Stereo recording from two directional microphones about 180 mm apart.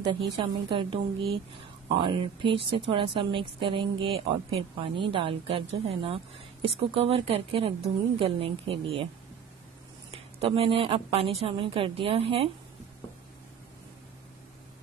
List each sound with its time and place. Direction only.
0.4 s a woman's voice: 25° right (ahead or behind)
10.1 s a woman's voice: 35° right (ahead or behind)